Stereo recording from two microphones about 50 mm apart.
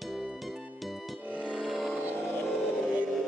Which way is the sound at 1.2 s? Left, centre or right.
Right.